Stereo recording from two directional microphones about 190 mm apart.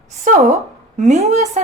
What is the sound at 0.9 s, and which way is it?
Speech, 35° right (ahead or behind).